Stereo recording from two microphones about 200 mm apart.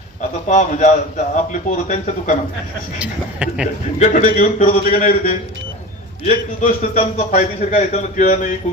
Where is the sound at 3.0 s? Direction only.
5° right (ahead or behind).